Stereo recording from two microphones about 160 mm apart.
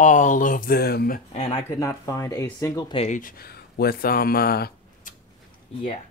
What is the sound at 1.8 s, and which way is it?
Speech, 20° left (ahead or behind).